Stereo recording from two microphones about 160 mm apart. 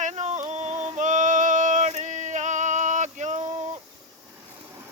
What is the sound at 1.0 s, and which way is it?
Male singing, 50° right (ahead or behind).